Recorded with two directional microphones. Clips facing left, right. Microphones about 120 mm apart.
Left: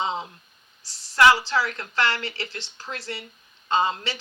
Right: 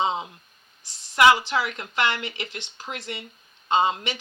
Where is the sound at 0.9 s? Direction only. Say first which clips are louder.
Even; 20° right (ahead or behind).